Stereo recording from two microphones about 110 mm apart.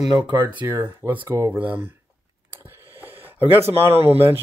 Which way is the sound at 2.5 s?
20° right (ahead or behind).